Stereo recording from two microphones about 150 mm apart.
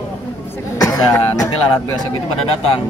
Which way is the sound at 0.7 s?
25° left (ahead or behind).